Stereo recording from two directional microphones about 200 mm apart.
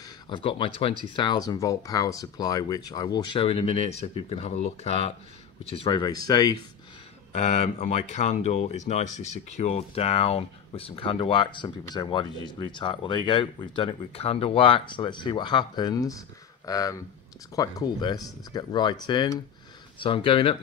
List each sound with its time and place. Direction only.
0.0 s speech: 25° left (ahead or behind)
7.3 s speech: 35° left (ahead or behind)